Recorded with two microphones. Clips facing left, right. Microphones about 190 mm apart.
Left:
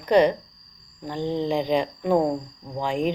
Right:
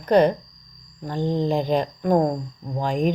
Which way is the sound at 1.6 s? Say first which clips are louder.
Right 1 dB; 45° right (ahead or behind).